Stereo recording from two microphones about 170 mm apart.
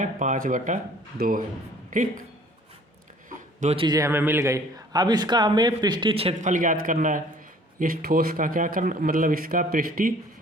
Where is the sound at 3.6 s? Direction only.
35° right (ahead or behind).